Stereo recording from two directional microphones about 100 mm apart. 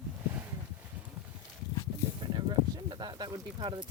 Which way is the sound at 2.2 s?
45° right (ahead or behind).